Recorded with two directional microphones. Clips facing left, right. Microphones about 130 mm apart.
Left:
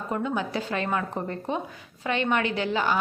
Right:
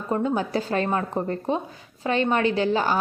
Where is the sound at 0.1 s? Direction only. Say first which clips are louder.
Right 5 dB; 35° right (ahead or behind).